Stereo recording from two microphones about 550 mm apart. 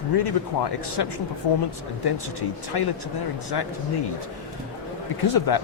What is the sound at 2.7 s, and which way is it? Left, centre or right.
Speech, left.